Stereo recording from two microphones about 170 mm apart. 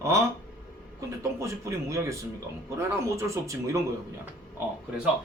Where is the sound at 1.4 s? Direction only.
15° right (ahead or behind).